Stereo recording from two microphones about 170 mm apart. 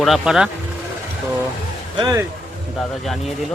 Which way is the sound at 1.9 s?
20° right (ahead or behind).